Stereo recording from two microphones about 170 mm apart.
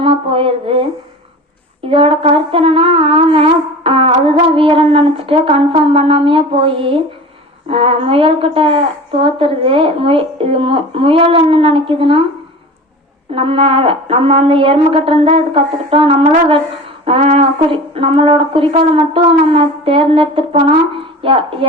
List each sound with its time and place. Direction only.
0.0 s a sound: 30° right (ahead or behind)
1.9 s shofar: 35° right (ahead or behind)
13.3 s shofar: 35° right (ahead or behind)